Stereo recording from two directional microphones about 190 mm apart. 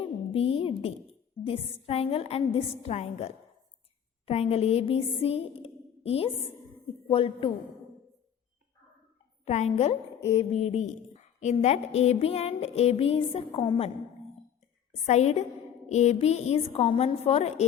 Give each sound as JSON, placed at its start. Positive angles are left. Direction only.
{"t": 0.0, "sound": "a sound", "side_deg": 30}
{"t": 1.5, "sound": "a woman's voice", "side_deg": 30}
{"t": 4.3, "sound": "a sound", "side_deg": 35}
{"t": 7.1, "sound": "a woman's voice", "side_deg": 30}
{"t": 9.4, "sound": "a woman's voice", "side_deg": 35}
{"t": 15.0, "sound": "a woman's voice", "side_deg": 35}